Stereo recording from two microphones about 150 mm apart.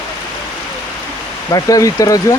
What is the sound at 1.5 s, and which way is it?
Speech, 25° left (ahead or behind).